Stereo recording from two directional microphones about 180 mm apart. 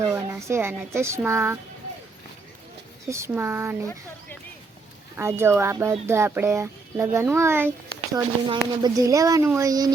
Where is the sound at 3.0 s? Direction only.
15° right (ahead or behind).